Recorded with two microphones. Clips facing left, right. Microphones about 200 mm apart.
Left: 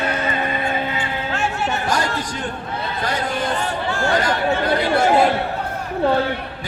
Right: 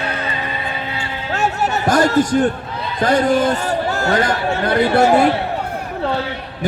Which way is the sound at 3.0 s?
50° right (ahead or behind).